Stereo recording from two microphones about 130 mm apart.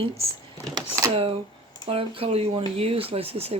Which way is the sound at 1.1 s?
50° right (ahead or behind).